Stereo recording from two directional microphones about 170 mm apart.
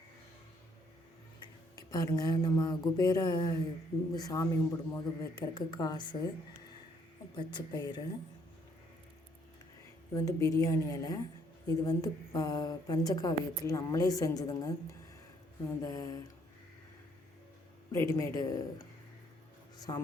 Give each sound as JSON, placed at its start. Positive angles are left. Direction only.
{"t": 1.7, "sound": "a woman's voice", "side_deg": 20}
{"t": 7.3, "sound": "a woman's voice", "side_deg": 25}
{"t": 10.2, "sound": "a woman's voice", "side_deg": 20}
{"t": 15.8, "sound": "a woman's voice", "side_deg": 20}
{"t": 17.9, "sound": "a woman's voice", "side_deg": 20}